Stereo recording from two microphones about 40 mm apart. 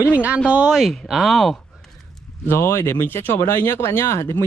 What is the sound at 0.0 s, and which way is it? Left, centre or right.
Speech, right.